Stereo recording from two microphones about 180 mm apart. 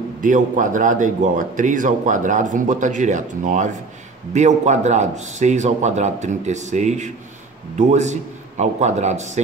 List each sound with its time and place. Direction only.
0.2 s a man's voice: 45° right (ahead or behind)